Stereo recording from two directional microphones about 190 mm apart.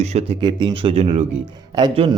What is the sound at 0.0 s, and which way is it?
Speech, 35° right (ahead or behind).